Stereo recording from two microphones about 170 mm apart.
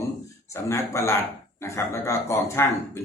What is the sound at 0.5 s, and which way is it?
Speech, 15° left (ahead or behind).